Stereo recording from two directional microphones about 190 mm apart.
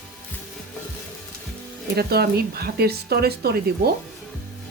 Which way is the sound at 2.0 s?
55° right (ahead or behind).